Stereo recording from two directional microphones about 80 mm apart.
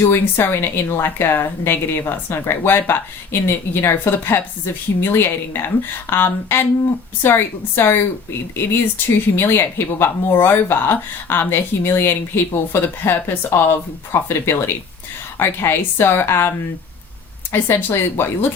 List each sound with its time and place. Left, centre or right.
0.0 s a woman's voice: left
17.5 s a woman's voice: left